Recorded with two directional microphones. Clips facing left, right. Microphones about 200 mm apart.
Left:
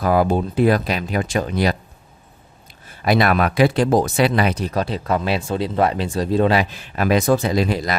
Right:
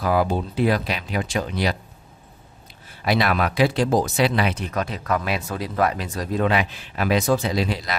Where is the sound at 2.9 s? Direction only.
50° left (ahead or behind).